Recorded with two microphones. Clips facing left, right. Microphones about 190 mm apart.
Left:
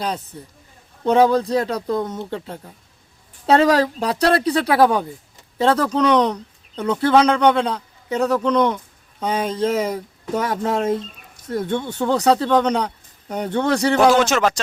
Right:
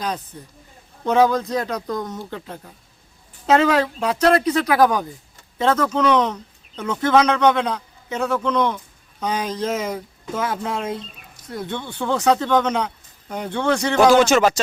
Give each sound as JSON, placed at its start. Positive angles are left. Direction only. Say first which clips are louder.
{"t": 1.0, "sound": "speech", "louder": "left 2 dB", "side_deg": 30}
{"t": 14.1, "sound": "speech", "louder": "right 2 dB", "side_deg": 0}